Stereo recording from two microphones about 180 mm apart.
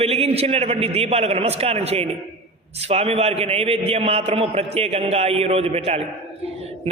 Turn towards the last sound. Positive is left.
turn(degrees=-35)  # may be behind; listen again after turning